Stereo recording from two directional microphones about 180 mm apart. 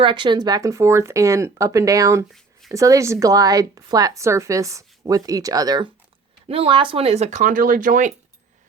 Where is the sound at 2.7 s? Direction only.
20° right (ahead or behind); by 8.1 s 45° right (ahead or behind).